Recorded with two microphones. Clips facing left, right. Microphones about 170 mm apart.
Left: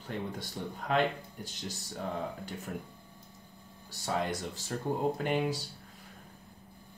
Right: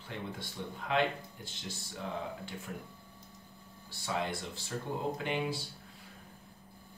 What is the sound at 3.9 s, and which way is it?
Speech, 40° left (ahead or behind).